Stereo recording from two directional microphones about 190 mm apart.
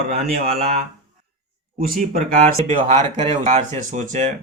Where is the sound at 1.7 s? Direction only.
50° right (ahead or behind).